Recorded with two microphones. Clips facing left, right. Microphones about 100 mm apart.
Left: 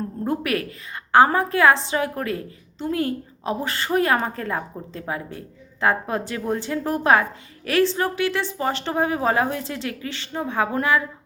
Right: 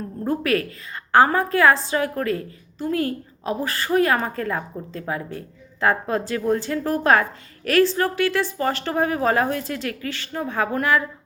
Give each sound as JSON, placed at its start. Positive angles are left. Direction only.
{"t": 0.3, "sound": "a woman's voice", "side_deg": 20}